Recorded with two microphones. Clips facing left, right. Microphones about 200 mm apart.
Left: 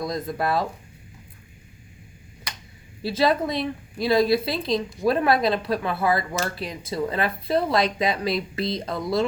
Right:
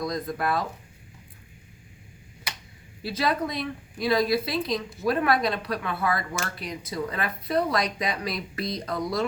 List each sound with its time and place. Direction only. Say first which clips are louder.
0.0 s speech: left 2 dB; 25° left (ahead or behind)
3.0 s speech: left 5 dB; 30° left (ahead or behind)